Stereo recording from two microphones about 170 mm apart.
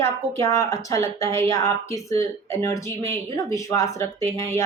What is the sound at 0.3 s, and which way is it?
Speech, 15° left (ahead or behind).